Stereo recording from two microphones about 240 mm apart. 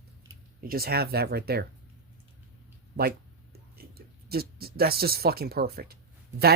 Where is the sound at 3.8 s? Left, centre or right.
Right.